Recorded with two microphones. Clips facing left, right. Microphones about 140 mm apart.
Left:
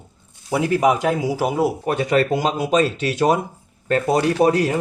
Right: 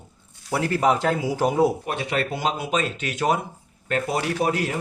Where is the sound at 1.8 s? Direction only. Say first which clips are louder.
Left 7 dB; 45° left (ahead or behind).